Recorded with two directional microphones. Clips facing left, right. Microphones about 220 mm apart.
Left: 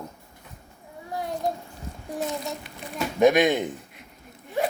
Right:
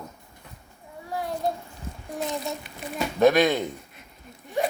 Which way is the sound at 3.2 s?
15° left (ahead or behind).